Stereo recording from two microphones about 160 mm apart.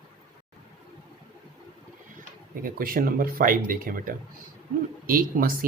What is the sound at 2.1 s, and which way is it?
Speech, 60° right (ahead or behind).